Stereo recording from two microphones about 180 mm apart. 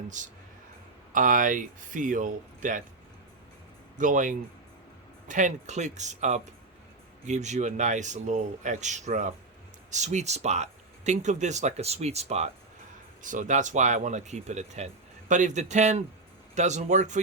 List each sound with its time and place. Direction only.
0.2 s speech: 45° right (ahead or behind)
3.9 s speech: 45° right (ahead or behind)